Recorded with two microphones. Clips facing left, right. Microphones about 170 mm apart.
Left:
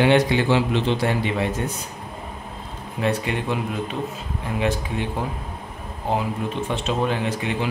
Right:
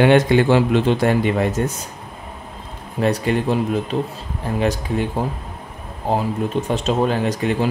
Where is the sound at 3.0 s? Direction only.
40° right (ahead or behind).